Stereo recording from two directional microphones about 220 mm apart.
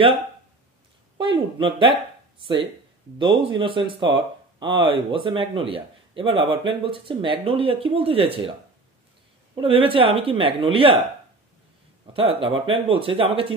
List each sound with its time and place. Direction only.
1.1 s speech: 25° right (ahead or behind)
9.6 s speech: 25° right (ahead or behind)
12.1 s speech: 25° right (ahead or behind)